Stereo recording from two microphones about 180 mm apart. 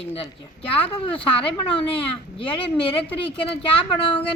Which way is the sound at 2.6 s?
30° left (ahead or behind).